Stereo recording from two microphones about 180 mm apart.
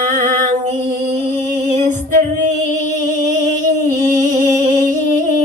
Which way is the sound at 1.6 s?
40° right (ahead or behind).